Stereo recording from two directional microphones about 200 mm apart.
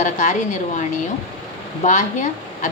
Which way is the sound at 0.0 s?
35° left (ahead or behind).